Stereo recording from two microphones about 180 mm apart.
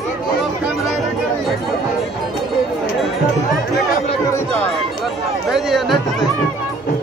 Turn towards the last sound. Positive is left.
turn(degrees=0)  # may be behind; listen again after turning